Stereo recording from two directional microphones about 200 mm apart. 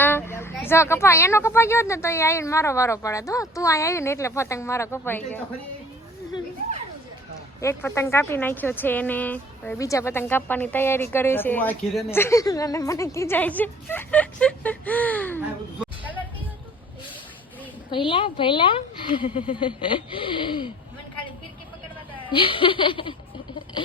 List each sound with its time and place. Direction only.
0.0 s speech: 10° left (ahead or behind)
7.6 s speech: 10° left (ahead or behind)
17.9 s speech: 25° left (ahead or behind)
22.3 s speech: 25° left (ahead or behind)